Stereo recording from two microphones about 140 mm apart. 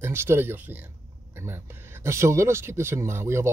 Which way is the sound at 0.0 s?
15° right (ahead or behind).